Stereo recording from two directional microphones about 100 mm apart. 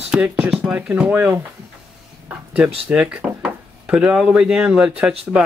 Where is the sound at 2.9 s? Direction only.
10° right (ahead or behind).